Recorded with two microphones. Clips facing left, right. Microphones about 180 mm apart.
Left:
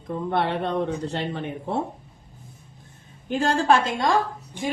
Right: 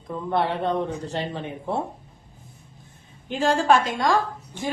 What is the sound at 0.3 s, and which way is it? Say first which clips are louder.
Speech: right 1 dB; 65° left (ahead or behind).